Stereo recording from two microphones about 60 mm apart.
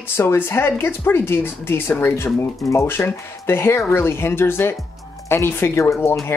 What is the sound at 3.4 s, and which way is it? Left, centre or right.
Speech, left.